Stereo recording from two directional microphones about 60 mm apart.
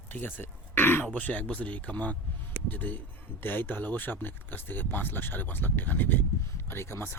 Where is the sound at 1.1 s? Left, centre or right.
Left.